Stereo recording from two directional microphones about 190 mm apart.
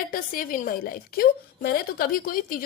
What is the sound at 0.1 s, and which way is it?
A woman's voice, 50° left (ahead or behind).